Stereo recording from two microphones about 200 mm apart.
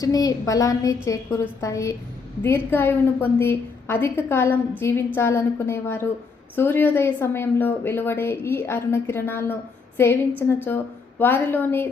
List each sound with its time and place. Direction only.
0.0 s speech: 20° left (ahead or behind)
11.2 s speech: 10° left (ahead or behind)